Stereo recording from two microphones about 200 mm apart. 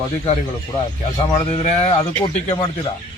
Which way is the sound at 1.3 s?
30° left (ahead or behind).